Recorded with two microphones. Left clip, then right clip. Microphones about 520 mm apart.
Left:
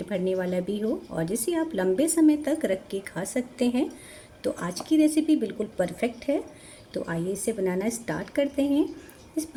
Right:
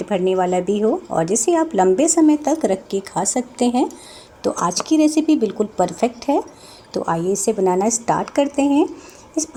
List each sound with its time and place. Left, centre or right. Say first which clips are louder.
0.1 s a woman's voice: right 10 dB; left